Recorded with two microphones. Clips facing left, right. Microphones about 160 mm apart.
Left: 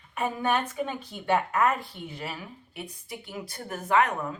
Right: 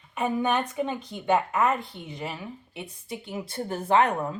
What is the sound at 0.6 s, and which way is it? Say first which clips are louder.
Speech: right 3 dB; 20° right (ahead or behind).